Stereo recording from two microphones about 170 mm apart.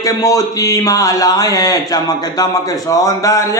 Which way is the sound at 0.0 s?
20° left (ahead or behind).